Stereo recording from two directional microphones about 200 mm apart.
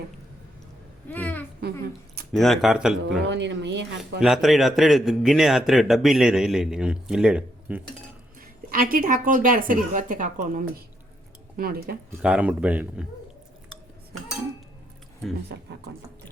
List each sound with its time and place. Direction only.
1.0 s babbling: 10° left (ahead or behind)
2.3 s a man's voice: centre (ahead or behind)
3.2 s speech: 60° right (ahead or behind)
4.2 s a man's voice: centre (ahead or behind)
8.4 s speech: 45° right (ahead or behind)
12.2 s speech: 5° right (ahead or behind)